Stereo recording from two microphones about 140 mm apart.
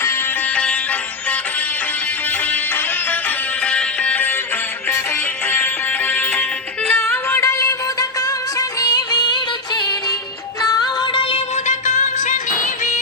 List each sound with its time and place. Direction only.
0.0 s music: 15° left (ahead or behind)
2.5 s music: 10° left (ahead or behind)
5.5 s music: 15° left (ahead or behind); by 11.4 s 40° left (ahead or behind)
11.5 s music: 55° left (ahead or behind)